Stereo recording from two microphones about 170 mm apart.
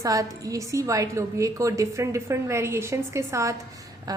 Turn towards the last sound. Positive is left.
turn(degrees=-15)  # may be behind; listen again after turning